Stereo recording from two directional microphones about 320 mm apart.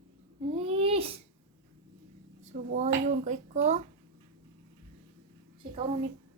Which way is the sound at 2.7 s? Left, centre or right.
Right.